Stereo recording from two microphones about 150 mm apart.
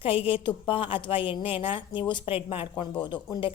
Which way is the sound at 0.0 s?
40° left (ahead or behind).